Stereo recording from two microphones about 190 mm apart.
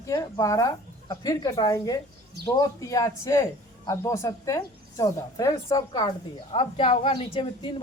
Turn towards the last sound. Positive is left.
turn(degrees=25)  # may be behind; listen again after turning